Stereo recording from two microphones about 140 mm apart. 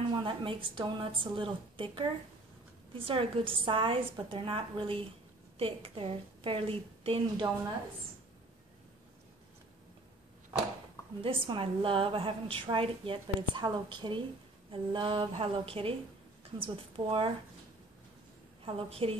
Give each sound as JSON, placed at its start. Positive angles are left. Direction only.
{"t": 0.1, "sound": "a woman's voice", "side_deg": -35}
{"t": 11.2, "sound": "a woman's voice", "side_deg": -40}
{"t": 18.6, "sound": "a woman's voice", "side_deg": -40}